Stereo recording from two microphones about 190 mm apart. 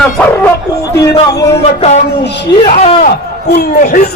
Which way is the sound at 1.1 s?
20° left (ahead or behind).